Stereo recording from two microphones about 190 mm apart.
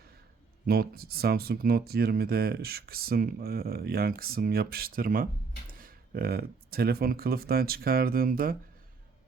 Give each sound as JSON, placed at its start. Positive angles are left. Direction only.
{"t": 0.7, "sound": "speech", "side_deg": -55}